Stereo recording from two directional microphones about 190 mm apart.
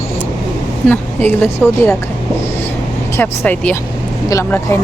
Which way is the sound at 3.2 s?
10° left (ahead or behind).